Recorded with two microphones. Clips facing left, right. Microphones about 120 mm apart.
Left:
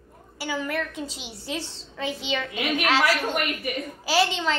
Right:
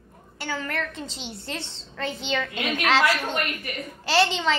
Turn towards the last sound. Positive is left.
turn(degrees=0)  # may be behind; listen again after turning